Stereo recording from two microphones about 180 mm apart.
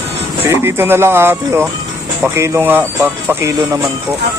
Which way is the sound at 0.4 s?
15° right (ahead or behind).